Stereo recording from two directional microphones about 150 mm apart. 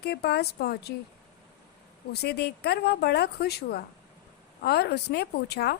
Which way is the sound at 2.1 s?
90° left.